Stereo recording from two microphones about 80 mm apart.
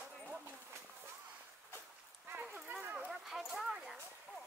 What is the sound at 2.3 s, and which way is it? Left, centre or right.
Dog, right.